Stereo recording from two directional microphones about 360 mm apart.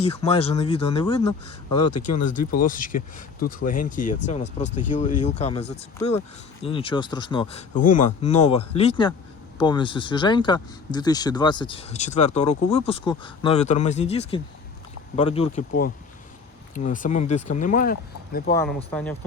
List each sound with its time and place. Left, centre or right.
0.0 s speech: centre
2.6 s speech: left
18.5 s speech: centre